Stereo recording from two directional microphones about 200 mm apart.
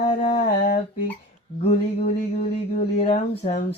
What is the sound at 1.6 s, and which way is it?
Speech, 30° left (ahead or behind).